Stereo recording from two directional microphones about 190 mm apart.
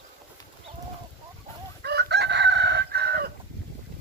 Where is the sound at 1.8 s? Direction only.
60° right (ahead or behind).